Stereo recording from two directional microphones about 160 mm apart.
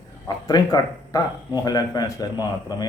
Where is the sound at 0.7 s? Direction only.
25° left (ahead or behind).